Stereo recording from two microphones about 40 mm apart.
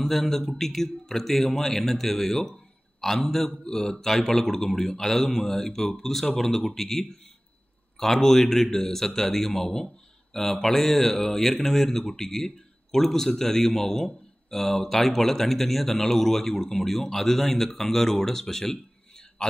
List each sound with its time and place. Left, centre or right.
0.1 s a man's voice: centre
3.7 s speech: centre
18.2 s a sound: centre